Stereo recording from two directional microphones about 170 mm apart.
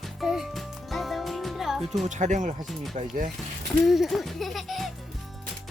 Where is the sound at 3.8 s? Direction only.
Centre (ahead or behind).